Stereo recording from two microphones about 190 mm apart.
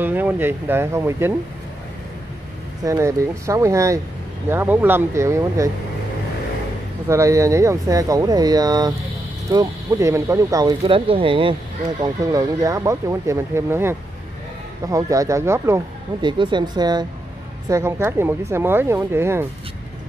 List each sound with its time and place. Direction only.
0.0 s speech: 10° right (ahead or behind)
2.8 s speech: 15° right (ahead or behind)
7.1 s speech: 15° right (ahead or behind)
16.3 s speech: 25° right (ahead or behind)